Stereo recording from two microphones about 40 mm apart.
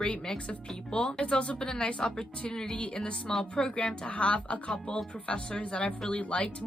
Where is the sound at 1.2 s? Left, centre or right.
Left.